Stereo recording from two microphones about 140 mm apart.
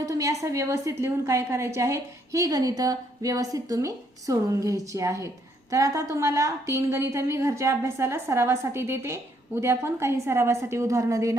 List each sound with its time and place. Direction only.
0.0 s a woman's voice: 25° right (ahead or behind)